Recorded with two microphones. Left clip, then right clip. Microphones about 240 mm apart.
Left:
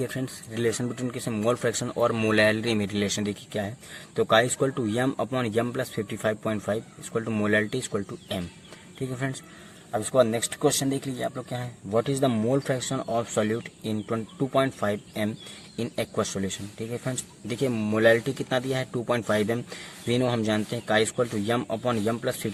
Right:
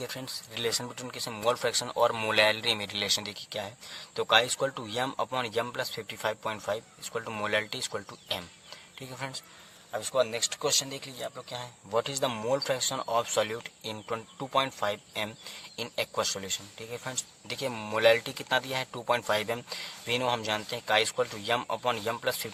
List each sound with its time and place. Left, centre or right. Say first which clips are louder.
0.0 s speech: left 5 dB; right
9.9 s speech: left 6 dB; right